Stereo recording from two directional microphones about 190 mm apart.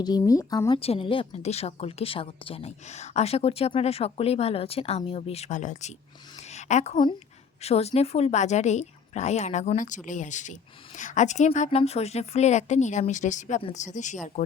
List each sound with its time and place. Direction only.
0.0 s speech: 20° left (ahead or behind)
0.8 s a woman's voice: 30° left (ahead or behind)